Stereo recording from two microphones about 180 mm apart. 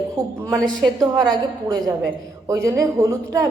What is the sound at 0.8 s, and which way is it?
A woman's voice, 20° right (ahead or behind).